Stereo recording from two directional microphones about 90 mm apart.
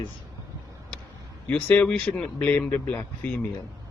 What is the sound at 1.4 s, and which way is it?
Speech, 15° left (ahead or behind).